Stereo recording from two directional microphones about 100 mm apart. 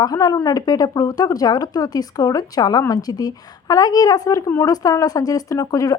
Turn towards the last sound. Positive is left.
turn(degrees=35)  # may be behind; listen again after turning